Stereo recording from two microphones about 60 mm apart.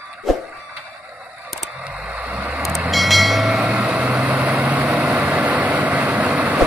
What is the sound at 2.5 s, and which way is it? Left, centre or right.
Vehicle, centre.